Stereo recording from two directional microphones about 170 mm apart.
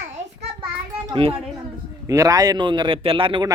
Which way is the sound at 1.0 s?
30° right (ahead or behind).